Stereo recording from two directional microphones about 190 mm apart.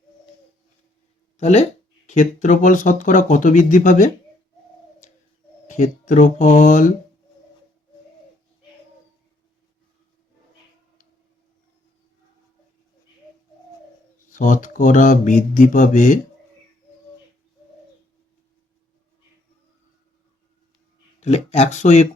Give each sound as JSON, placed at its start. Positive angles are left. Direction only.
{"t": 1.4, "sound": "speech", "side_deg": 35}
{"t": 5.6, "sound": "speech", "side_deg": 40}
{"t": 14.3, "sound": "speech", "side_deg": 45}
{"t": 21.2, "sound": "speech", "side_deg": 35}